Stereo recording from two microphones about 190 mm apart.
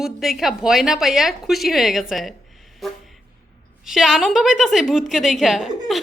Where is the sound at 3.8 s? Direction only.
Centre (ahead or behind).